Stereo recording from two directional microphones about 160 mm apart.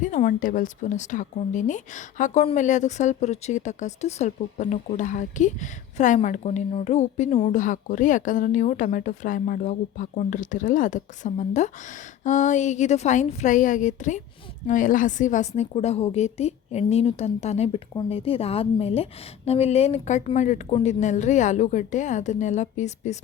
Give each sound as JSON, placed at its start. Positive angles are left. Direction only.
{"t": 0.0, "sound": "a woman's voice", "side_deg": 55}